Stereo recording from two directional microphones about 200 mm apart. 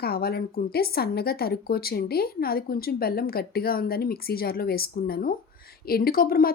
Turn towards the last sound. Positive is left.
turn(degrees=45)  # may be behind; listen again after turning